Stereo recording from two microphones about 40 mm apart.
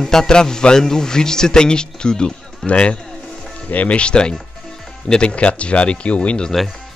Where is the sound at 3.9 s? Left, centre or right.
Left.